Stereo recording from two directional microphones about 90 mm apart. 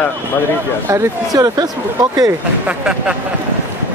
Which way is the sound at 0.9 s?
45° right (ahead or behind).